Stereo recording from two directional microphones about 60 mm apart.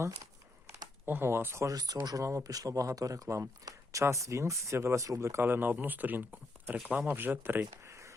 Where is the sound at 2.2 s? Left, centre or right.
Right.